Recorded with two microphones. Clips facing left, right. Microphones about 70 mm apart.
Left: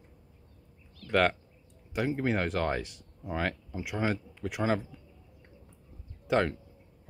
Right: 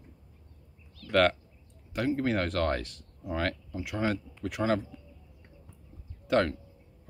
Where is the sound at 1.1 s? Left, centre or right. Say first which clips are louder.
Right 2 dB; centre.